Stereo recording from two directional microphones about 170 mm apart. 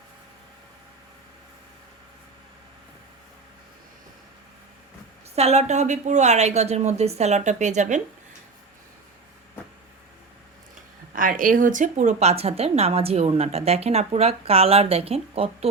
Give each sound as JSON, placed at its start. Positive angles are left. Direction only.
{"t": 5.3, "sound": "speech", "side_deg": -40}
{"t": 11.1, "sound": "speech", "side_deg": -55}